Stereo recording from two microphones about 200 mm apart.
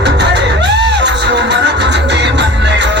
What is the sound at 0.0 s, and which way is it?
Music, 60° right (ahead or behind).